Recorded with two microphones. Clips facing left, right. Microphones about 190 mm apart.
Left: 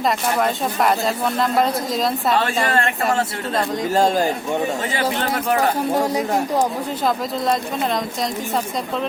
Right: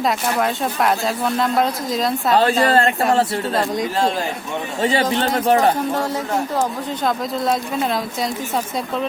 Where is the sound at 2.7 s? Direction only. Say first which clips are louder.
Right 4 dB; 35° right (ahead or behind).